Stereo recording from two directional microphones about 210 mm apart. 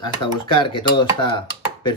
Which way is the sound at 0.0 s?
25° left (ahead or behind).